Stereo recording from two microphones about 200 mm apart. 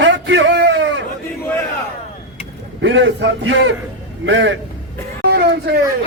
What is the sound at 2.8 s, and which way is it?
A man's voice, 65° right (ahead or behind).